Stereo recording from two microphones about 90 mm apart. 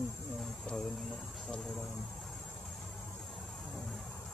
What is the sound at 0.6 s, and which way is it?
Speech, 5° left (ahead or behind).